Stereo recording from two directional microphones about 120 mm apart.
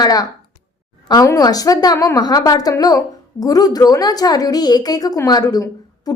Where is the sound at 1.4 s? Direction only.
30° left (ahead or behind).